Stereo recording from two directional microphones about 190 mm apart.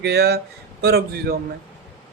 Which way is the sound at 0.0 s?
55° right (ahead or behind).